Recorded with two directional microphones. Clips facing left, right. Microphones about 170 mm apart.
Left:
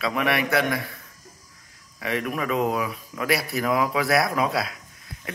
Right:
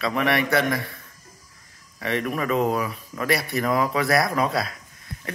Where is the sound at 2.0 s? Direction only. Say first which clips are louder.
Right 1 dB; centre (ahead or behind).